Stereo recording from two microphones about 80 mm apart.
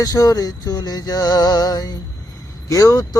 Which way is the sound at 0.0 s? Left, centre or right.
Left.